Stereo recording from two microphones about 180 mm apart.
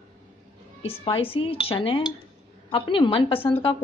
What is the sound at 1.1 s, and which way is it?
A woman's voice, 30° left (ahead or behind).